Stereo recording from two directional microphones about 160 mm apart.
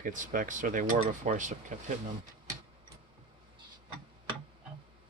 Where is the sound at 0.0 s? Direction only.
55° right (ahead or behind).